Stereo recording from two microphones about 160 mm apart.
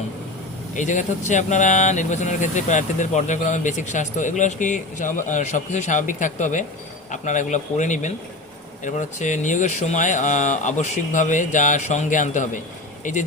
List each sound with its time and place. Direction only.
0.8 s speech: 50° left (ahead or behind)